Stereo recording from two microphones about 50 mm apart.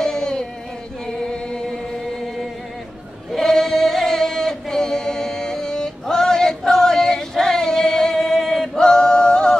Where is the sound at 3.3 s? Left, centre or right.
Centre.